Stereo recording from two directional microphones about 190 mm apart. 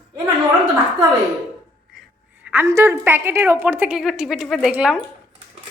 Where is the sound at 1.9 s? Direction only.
10° right (ahead or behind).